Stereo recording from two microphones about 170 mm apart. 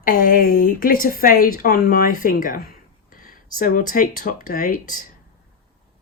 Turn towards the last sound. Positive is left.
turn(degrees=55)  # may be behind; listen again after turning